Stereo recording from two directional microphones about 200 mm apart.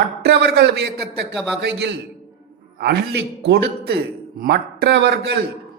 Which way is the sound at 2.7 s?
50° right (ahead or behind).